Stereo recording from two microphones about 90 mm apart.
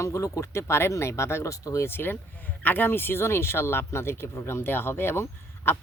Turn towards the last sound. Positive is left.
turn(degrees=30)  # may be behind; listen again after turning